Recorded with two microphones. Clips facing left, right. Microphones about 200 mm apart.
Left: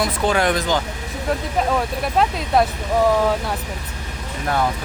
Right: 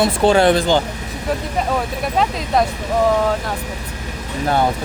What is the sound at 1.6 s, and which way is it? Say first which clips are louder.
Speech: left 1 dB; centre (ahead or behind).